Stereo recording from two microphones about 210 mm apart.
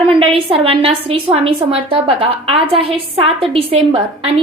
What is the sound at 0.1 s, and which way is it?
A woman's voice, 25° right (ahead or behind).